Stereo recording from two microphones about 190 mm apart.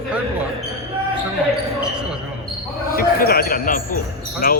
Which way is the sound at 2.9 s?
50° left (ahead or behind).